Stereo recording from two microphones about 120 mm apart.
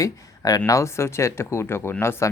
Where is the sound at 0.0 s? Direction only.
30° left (ahead or behind).